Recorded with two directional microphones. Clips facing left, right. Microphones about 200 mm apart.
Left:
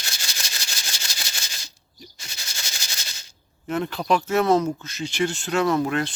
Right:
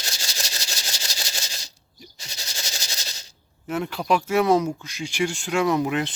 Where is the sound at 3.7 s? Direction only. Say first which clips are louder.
Left 1 dB; 10° right (ahead or behind).